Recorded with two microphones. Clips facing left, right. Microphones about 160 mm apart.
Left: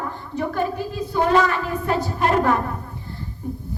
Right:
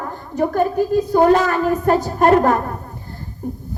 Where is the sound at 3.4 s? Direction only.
45° right (ahead or behind).